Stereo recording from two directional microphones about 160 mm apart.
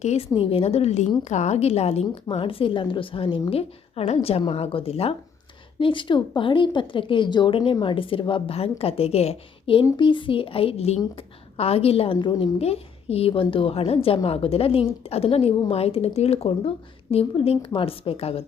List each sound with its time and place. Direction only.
0.0 s a woman's voice: 45° left (ahead or behind)